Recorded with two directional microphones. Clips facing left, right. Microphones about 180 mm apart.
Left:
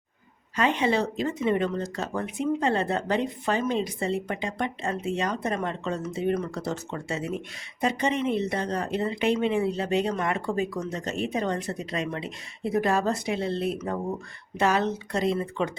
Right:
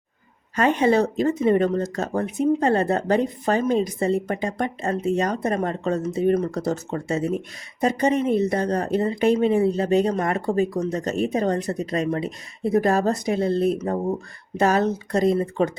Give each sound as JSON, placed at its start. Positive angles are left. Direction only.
{"t": 0.5, "sound": "speech", "side_deg": -45}